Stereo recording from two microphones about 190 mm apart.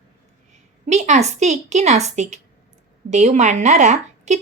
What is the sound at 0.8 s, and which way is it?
Speech, 40° right (ahead or behind).